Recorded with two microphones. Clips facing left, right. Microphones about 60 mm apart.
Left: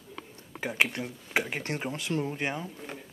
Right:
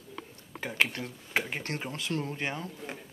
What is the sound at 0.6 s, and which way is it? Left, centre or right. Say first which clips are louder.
Speech: left 1 dB; centre.